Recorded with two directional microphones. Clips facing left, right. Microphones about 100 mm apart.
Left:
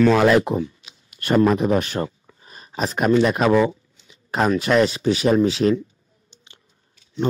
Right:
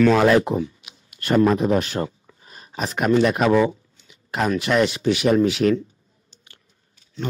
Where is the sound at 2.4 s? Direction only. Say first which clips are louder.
Left 3 dB; 35° left (ahead or behind).